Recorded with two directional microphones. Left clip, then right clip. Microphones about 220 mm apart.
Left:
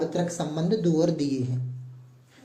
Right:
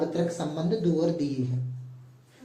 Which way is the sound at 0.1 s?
55° left (ahead or behind).